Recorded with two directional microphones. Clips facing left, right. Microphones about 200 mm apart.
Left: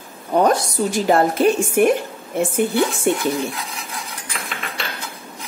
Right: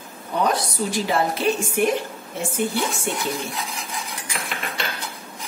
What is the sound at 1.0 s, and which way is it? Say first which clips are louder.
A woman's voice: left 7 dB; 50° left (ahead or behind).